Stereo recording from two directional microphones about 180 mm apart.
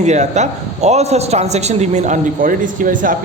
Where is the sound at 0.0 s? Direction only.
40° right (ahead or behind).